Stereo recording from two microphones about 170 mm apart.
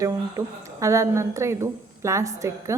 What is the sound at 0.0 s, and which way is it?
A woman's voice, 20° right (ahead or behind).